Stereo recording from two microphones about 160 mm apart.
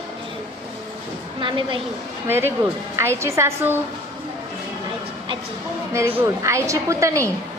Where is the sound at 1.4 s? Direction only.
30° right (ahead or behind).